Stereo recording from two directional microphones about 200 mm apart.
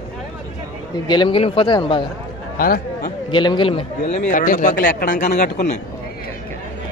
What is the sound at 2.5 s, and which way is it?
Chatter, 45° left (ahead or behind).